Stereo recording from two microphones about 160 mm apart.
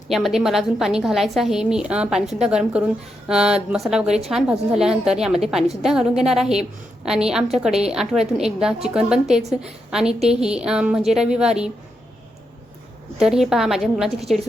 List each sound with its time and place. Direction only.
0.1 s a woman's voice: centre (ahead or behind)
13.1 s a woman's voice: 5° right (ahead or behind)